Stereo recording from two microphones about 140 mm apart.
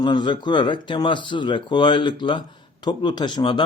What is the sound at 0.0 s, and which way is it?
Speech, 30° left (ahead or behind).